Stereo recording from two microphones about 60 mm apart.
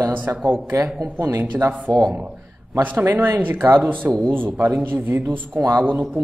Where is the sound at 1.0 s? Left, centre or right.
Right.